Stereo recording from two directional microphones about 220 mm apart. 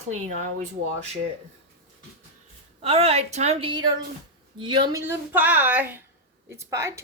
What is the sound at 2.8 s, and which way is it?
A woman's voice, 25° right (ahead or behind).